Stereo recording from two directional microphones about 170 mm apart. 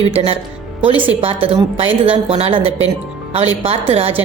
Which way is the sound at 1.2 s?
30° right (ahead or behind).